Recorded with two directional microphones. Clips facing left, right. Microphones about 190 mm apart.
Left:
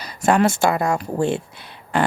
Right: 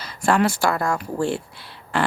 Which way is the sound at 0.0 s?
20° left (ahead or behind).